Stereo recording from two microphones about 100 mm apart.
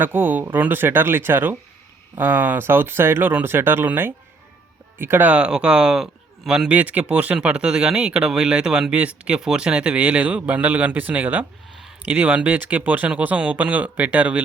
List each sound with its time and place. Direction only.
0.0 s a man's voice: 20° right (ahead or behind)